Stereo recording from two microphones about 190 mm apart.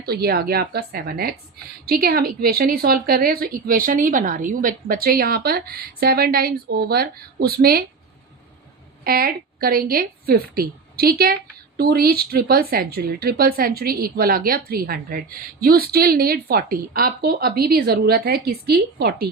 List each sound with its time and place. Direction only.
0.0 s speech: 55° right (ahead or behind)
9.0 s speech: 50° right (ahead or behind)